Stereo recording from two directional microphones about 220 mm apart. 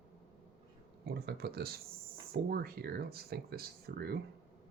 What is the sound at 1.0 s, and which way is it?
Speech, 45° right (ahead or behind).